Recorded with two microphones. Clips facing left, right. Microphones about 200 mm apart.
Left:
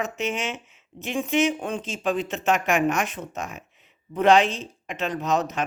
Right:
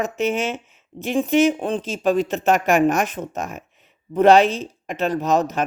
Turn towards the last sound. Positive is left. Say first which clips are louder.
# right 5 dB
turn(degrees=-40)  # may be behind; listen again after turning